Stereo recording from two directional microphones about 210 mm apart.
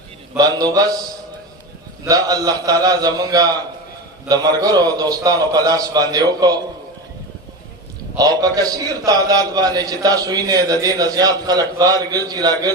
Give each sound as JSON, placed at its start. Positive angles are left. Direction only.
{"t": 0.3, "sound": "a man's voice", "side_deg": -20}
{"t": 2.0, "sound": "a man's voice", "side_deg": -15}
{"t": 8.2, "sound": "a man's voice", "side_deg": -20}